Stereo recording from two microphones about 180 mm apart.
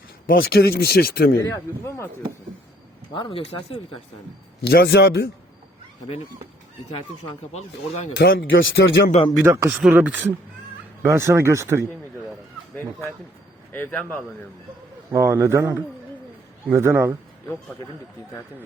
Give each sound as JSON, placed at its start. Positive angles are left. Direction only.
{"t": 0.3, "sound": "speech", "side_deg": 60}
{"t": 3.1, "sound": "speech", "side_deg": 25}
{"t": 4.6, "sound": "speech", "side_deg": 65}
{"t": 6.9, "sound": "speech", "side_deg": 35}
{"t": 8.1, "sound": "speech", "side_deg": 65}
{"t": 9.4, "sound": "speech", "side_deg": -15}
{"t": 12.7, "sound": "speech", "side_deg": 10}
{"t": 15.1, "sound": "speech", "side_deg": -15}